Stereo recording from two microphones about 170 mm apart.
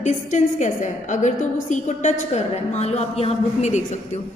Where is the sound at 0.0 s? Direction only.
45° left (ahead or behind).